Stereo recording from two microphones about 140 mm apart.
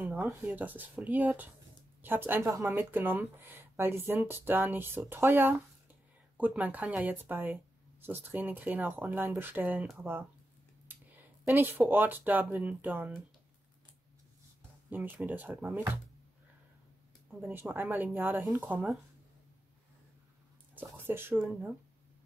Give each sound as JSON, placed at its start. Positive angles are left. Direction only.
{"t": 0.0, "sound": "a sound", "side_deg": -5}
{"t": 0.4, "sound": "speech", "side_deg": -10}
{"t": 14.9, "sound": "speech", "side_deg": -10}
{"t": 17.4, "sound": "speech", "side_deg": -15}
{"t": 20.7, "sound": "speech", "side_deg": -15}